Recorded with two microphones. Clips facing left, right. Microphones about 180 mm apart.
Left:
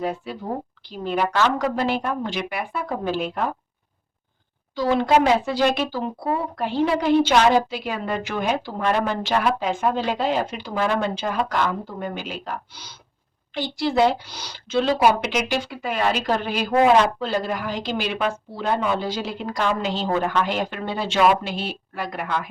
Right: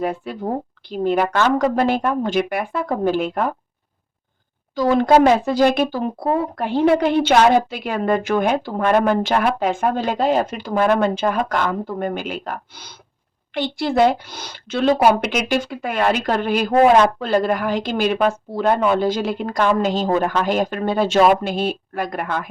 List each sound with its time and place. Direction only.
0.0 s a woman's voice: 55° right (ahead or behind)
4.7 s a woman's voice: 45° right (ahead or behind)